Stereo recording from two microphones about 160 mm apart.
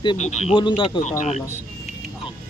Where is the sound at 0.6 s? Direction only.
30° left (ahead or behind).